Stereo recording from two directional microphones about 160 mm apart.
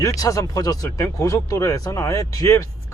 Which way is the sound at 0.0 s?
20° left (ahead or behind).